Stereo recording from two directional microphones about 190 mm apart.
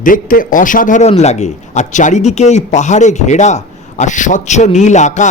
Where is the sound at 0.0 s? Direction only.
45° left (ahead or behind).